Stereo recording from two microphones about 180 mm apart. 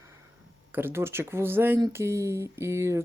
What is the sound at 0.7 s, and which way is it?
Speech, 10° right (ahead or behind).